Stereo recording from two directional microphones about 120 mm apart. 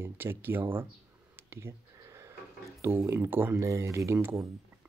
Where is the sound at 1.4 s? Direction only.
20° right (ahead or behind).